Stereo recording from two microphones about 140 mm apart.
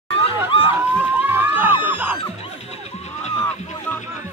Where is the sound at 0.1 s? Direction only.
40° left (ahead or behind).